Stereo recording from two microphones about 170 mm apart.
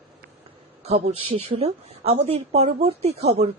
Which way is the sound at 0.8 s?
35° right (ahead or behind).